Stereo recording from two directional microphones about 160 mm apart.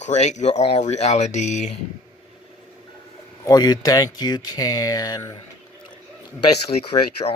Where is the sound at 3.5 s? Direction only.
25° left (ahead or behind).